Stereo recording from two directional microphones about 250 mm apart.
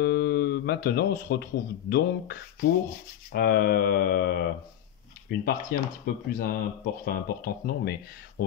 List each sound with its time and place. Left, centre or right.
0.0 s speech: left